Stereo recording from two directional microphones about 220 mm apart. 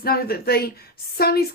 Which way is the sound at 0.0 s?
45° left (ahead or behind).